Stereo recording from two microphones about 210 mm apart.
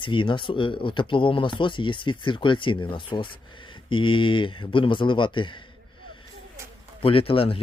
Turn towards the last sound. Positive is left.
turn(degrees=25)  # may be behind; listen again after turning